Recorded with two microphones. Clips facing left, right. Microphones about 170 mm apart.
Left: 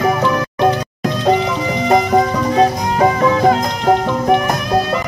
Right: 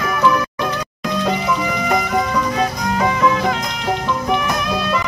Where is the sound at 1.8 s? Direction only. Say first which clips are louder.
Left 8 dB; 35° left (ahead or behind).